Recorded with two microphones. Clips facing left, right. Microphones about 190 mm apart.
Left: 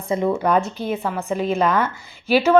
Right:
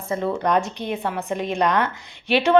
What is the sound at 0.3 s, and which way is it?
A woman's voice, 5° left (ahead or behind).